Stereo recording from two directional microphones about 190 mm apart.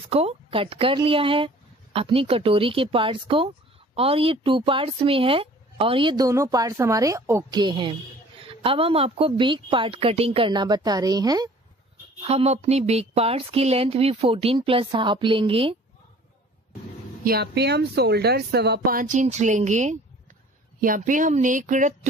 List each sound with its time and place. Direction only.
0.1 s speech: 30° right (ahead or behind)
12.2 s speech: 35° right (ahead or behind)
17.2 s speech: 55° right (ahead or behind)